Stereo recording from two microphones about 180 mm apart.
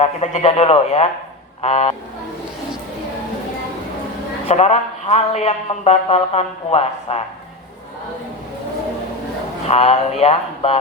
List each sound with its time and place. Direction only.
0.0 s speech: 35° left (ahead or behind)
4.4 s speech: 35° left (ahead or behind)
9.6 s speech: 35° left (ahead or behind)